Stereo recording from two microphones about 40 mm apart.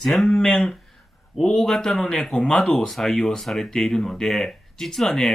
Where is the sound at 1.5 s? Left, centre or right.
Centre.